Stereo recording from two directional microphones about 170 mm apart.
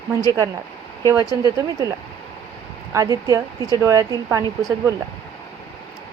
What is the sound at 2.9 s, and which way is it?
Speech, 20° right (ahead or behind).